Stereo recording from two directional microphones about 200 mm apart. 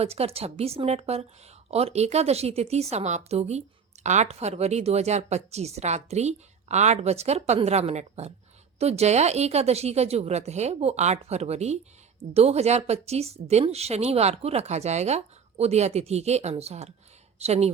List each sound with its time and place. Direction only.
0.0 s a woman's voice: 30° right (ahead or behind)